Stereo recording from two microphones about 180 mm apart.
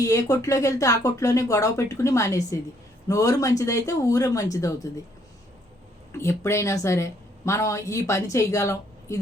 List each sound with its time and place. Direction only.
0.0 s a woman's voice: 20° left (ahead or behind)
6.1 s a woman's voice: 15° left (ahead or behind)